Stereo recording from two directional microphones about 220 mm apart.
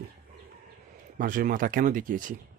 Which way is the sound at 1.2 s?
40° right (ahead or behind).